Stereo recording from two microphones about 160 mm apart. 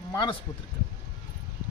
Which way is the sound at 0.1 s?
25° left (ahead or behind).